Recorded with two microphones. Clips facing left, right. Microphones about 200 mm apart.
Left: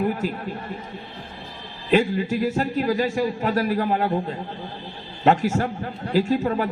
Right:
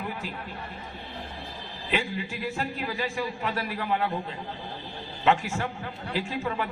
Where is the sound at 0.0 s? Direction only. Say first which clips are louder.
Left 11 dB; 45° left (ahead or behind).